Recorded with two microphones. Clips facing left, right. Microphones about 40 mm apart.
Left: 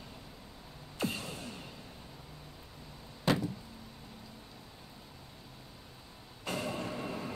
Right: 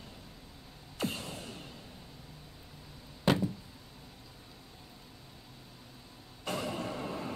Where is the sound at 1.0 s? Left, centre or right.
Centre.